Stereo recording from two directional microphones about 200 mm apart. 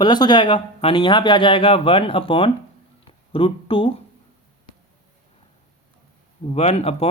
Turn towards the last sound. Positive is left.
turn(degrees=30)  # may be behind; listen again after turning